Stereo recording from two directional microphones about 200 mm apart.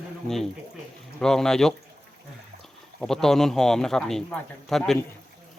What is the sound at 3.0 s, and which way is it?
A man's voice, centre (ahead or behind).